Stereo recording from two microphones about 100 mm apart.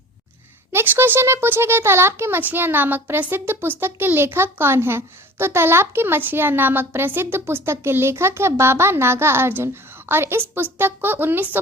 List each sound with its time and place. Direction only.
0.7 s a woman's voice: 25° right (ahead or behind)